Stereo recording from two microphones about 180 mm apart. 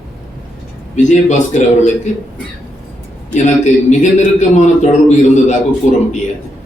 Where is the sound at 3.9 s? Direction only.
40° left (ahead or behind).